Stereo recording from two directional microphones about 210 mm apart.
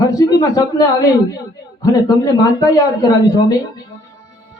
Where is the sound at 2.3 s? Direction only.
15° left (ahead or behind).